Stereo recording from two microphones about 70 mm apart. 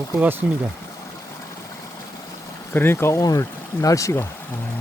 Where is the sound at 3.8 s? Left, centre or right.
Left.